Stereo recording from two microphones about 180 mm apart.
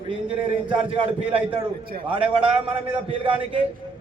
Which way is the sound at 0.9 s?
30° right (ahead or behind).